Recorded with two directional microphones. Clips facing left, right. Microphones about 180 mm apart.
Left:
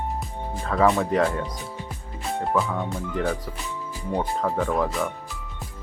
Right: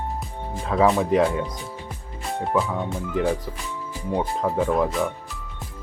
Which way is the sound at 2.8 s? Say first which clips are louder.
Right 3 dB; centre (ahead or behind).